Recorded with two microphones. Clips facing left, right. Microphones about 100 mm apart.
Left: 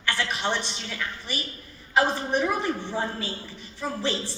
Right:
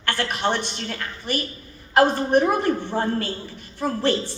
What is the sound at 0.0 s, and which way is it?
A man's voice, 55° right (ahead or behind).